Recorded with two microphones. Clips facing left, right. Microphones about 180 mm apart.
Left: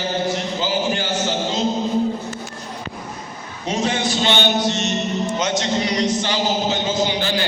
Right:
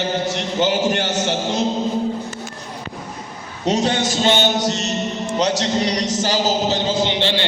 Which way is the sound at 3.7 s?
40° right (ahead or behind).